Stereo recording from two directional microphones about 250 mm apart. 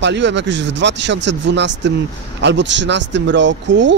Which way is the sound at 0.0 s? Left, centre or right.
Right.